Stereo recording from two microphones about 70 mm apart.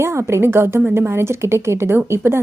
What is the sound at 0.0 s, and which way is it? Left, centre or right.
A woman's voice, right.